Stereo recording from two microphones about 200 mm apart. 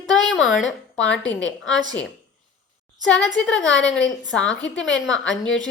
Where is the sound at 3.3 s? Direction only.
70° left (ahead or behind).